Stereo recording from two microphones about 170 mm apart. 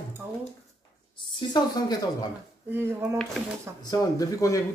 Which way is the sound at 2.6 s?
15° right (ahead or behind).